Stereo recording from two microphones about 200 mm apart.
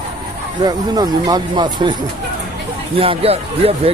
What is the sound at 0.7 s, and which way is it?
Speech, 20° right (ahead or behind).